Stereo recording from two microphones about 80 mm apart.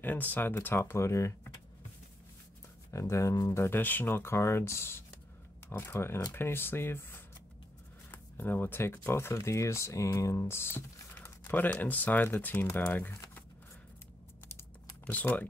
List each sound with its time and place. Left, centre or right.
0.0 s speech: left
2.9 s speech: left
15.0 s speech: left